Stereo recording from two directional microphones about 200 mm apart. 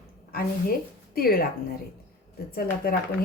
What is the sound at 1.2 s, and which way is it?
Speech, 50° left (ahead or behind).